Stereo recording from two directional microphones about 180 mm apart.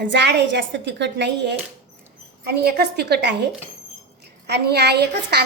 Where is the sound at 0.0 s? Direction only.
75° right (ahead or behind).